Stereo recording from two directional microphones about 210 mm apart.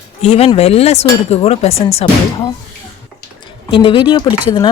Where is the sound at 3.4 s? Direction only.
25° left (ahead or behind).